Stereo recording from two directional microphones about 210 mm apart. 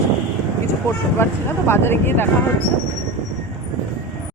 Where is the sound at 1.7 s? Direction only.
10° left (ahead or behind).